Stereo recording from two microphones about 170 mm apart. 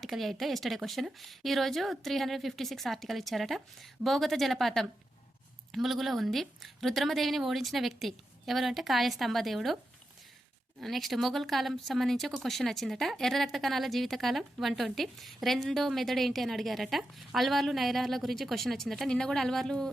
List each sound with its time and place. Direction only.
0.0 s a woman's voice: centre (ahead or behind)
10.8 s a woman's voice: centre (ahead or behind)